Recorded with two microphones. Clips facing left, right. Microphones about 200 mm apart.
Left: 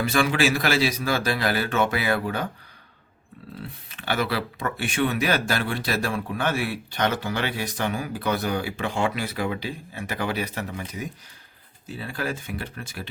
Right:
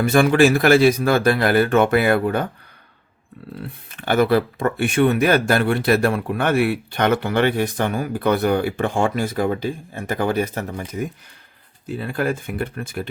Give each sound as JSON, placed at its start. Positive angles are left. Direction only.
{"t": 0.0, "sound": "speech", "side_deg": -50}
{"t": 3.6, "sound": "speech", "side_deg": -50}